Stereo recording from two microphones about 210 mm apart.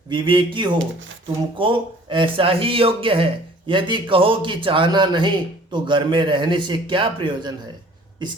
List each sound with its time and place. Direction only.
0.1 s speech: 25° right (ahead or behind)